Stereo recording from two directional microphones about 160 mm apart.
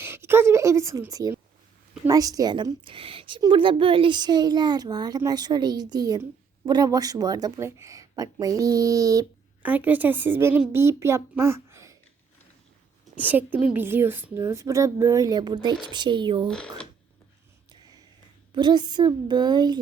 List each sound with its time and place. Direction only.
0.0 s a sound: 15° right (ahead or behind)
2.0 s a child's voice: 20° right (ahead or behind)
9.6 s a woman's voice: 10° right (ahead or behind)
13.1 s a woman's voice: 10° right (ahead or behind); by 16.5 s 30° right (ahead or behind)
16.5 s speech: 5° left (ahead or behind)
18.5 s a child's voice: 25° right (ahead or behind)